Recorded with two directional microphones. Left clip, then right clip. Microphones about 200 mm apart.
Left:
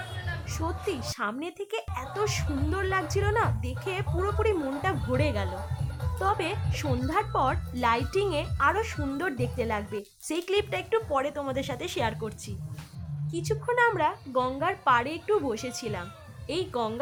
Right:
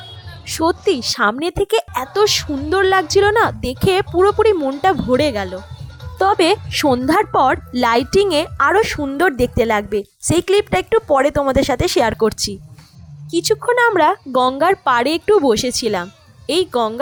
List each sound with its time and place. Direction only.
0.4 s speech: 45° right (ahead or behind)
6.1 s a woman's voice: 50° right (ahead or behind)